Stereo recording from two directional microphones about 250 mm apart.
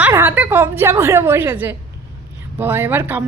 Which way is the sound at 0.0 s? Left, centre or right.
Centre.